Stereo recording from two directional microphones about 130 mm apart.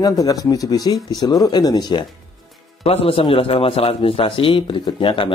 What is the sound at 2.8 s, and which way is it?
A man's voice, 50° left (ahead or behind).